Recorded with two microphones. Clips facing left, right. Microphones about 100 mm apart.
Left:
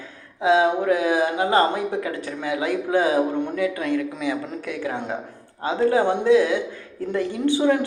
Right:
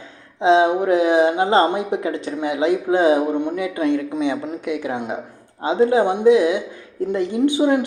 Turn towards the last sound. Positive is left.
turn(degrees=-20)  # may be behind; listen again after turning